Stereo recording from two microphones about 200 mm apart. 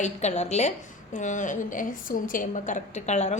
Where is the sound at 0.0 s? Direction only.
35° left (ahead or behind).